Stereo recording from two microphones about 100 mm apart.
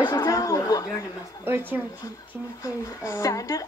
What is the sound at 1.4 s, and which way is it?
Speech, 20° right (ahead or behind).